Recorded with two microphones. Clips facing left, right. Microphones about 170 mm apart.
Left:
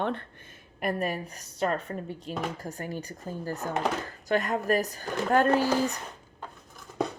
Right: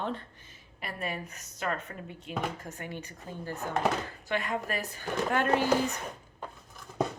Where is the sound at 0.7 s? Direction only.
45° left (ahead or behind).